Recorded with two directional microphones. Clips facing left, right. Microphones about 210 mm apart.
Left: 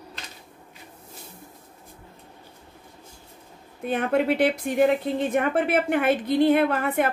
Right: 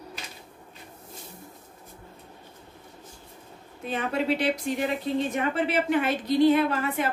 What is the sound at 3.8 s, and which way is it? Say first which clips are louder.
A woman's voice: left 5 dB; 55° left (ahead or behind).